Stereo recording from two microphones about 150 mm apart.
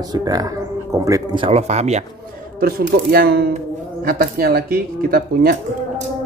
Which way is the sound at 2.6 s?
75° right (ahead or behind).